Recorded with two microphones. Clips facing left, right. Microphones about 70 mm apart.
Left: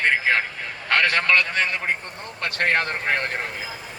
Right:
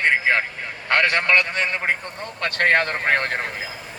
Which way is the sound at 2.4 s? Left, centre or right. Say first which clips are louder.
Right 3 dB; right.